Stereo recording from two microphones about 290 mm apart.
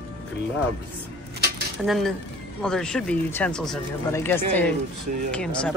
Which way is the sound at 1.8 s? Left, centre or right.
Centre.